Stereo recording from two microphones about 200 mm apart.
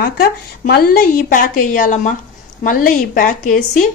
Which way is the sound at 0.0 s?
50° left (ahead or behind).